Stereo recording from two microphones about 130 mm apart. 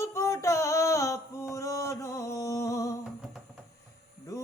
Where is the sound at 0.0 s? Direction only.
25° left (ahead or behind).